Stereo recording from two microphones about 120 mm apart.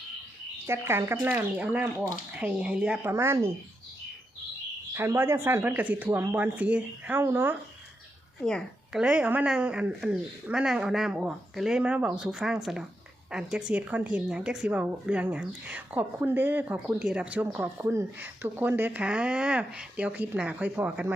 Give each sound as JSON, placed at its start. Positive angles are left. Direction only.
{"t": 0.7, "sound": "speech", "side_deg": -20}
{"t": 4.9, "sound": "speech", "side_deg": -20}
{"t": 8.4, "sound": "a woman's voice", "side_deg": 5}
{"t": 8.9, "sound": "a woman's voice", "side_deg": -10}